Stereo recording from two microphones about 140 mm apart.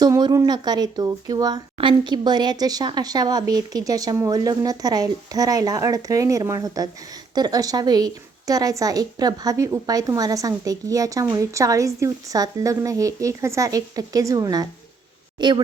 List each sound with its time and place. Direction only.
0.0 s a woman's voice: 30° right (ahead or behind)